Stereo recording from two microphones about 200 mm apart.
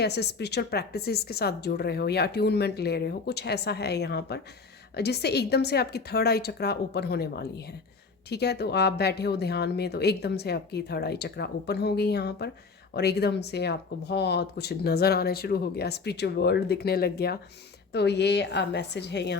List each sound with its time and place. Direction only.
0.0 s speech: 55° left (ahead or behind)